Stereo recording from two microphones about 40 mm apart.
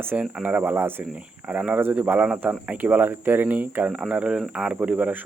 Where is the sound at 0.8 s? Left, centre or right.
Right.